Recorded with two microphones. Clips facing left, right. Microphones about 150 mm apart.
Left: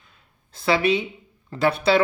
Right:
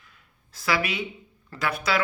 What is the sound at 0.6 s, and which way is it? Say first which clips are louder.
Speech: left 7 dB; 25° left (ahead or behind).